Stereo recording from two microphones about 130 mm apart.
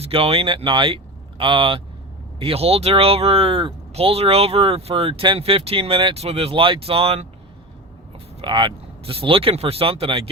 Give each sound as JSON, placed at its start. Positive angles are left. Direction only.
{"t": 0.0, "sound": "speech", "side_deg": -45}
{"t": 8.4, "sound": "speech", "side_deg": -35}